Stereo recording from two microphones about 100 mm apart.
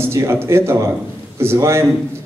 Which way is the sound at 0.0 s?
25° right (ahead or behind).